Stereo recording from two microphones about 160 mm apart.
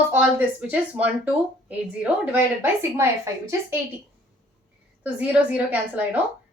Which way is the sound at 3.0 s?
15° right (ahead or behind).